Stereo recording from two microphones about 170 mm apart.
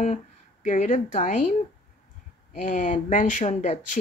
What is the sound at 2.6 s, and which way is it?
Speech, 50° left (ahead or behind).